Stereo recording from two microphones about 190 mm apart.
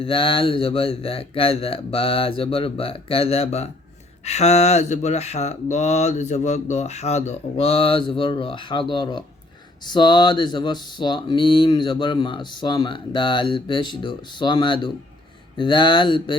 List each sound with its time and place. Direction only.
0.0 s speech: 25° left (ahead or behind)